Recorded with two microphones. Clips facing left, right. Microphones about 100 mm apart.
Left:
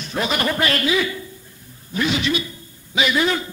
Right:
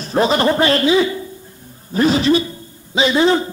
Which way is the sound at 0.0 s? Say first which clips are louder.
Right 8 dB; 35° right (ahead or behind).